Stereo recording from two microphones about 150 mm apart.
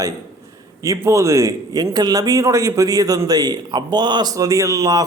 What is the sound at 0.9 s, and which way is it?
A man's voice, 20° right (ahead or behind).